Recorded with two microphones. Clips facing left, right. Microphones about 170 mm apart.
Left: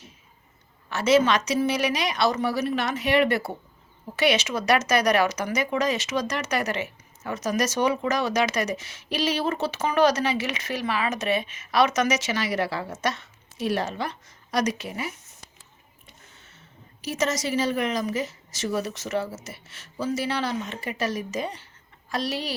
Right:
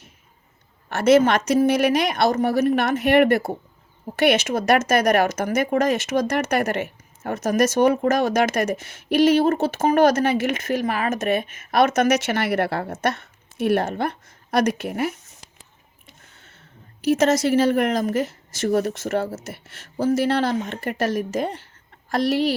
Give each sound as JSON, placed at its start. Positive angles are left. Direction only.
{"t": 0.9, "sound": "speech", "side_deg": -55}
{"t": 16.4, "sound": "a woman's voice", "side_deg": -55}